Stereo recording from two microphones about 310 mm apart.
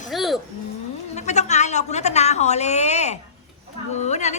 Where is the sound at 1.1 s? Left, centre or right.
Left.